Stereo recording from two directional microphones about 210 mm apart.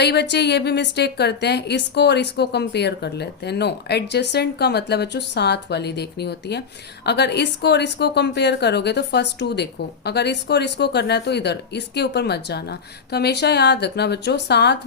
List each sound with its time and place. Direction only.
0.0 s a woman's voice: 55° left (ahead or behind)